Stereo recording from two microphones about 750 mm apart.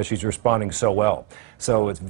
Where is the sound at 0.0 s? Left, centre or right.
Right.